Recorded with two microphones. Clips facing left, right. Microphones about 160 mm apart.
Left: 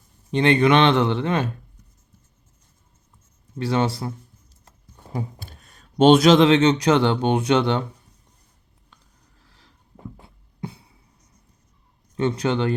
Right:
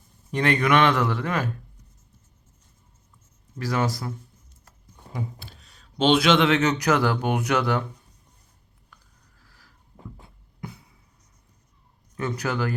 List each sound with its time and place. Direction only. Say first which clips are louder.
0.3 s speech: left 5 dB; 25° left (ahead or behind)
3.6 s speech: left 4 dB; 25° left (ahead or behind)
5.4 s speech: left 3 dB; 50° left (ahead or behind); by 7.9 s 25° left (ahead or behind)
8.9 s a sound: even; 25° left (ahead or behind)
10.6 s music: left 5 dB; 30° left (ahead or behind)
12.1 s speech: left 6 dB; 25° left (ahead or behind)